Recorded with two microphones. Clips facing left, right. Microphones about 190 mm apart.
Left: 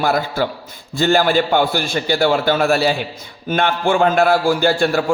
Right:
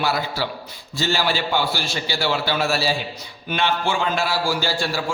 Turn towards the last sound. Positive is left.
turn(degrees=55)  # may be behind; listen again after turning